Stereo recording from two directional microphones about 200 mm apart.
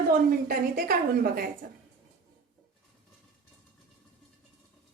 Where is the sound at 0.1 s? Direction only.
50° right (ahead or behind).